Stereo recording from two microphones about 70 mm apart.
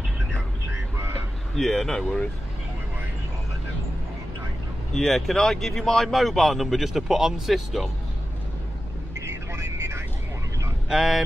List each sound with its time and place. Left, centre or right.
1.6 s speech: centre
4.9 s speech: centre
9.2 s vehicle: right
10.9 s speech: centre